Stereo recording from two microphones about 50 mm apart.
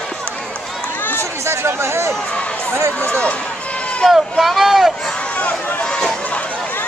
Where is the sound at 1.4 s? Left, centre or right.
Right.